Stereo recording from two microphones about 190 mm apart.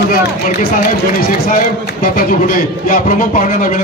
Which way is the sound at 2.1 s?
45° left (ahead or behind).